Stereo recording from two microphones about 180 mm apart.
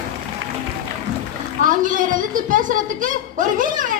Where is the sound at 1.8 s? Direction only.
45° right (ahead or behind).